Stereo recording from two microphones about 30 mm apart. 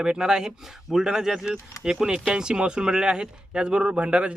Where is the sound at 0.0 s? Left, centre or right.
Right.